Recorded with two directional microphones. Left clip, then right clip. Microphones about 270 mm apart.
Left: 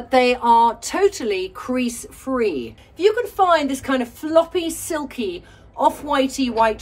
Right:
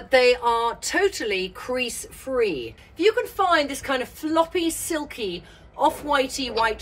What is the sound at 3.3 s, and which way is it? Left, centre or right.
A woman's voice, centre.